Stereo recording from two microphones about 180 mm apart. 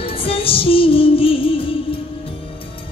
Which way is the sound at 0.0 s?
30° left (ahead or behind).